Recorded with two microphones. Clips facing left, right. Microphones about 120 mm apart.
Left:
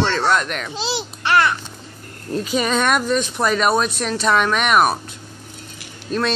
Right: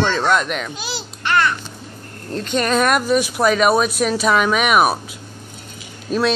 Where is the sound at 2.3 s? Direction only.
5° left (ahead or behind).